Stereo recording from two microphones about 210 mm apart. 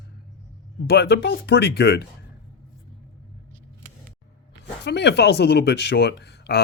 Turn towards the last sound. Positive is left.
turn(degrees=50)  # may be behind; listen again after turning